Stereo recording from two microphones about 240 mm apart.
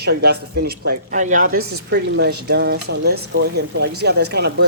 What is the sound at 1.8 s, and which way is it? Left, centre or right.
Speech, right.